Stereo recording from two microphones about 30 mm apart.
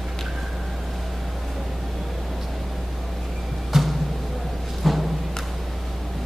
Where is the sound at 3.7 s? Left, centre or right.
Centre.